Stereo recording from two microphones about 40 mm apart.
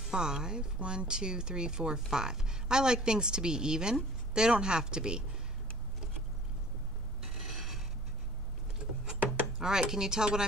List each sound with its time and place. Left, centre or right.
0.1 s speech: centre
7.2 s a sound: centre
9.6 s speech: centre